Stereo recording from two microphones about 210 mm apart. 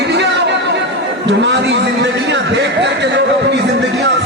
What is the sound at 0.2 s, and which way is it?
Chatter, 55° right (ahead or behind).